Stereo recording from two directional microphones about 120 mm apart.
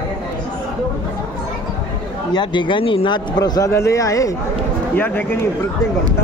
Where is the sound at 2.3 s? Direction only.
40° left (ahead or behind).